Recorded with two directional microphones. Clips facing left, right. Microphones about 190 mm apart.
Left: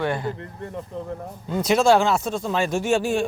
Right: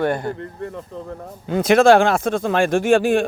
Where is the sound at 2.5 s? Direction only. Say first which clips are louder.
Right 6 dB; 55° right (ahead or behind).